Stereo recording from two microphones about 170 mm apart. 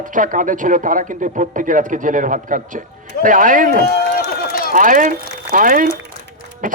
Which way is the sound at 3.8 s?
70° left (ahead or behind).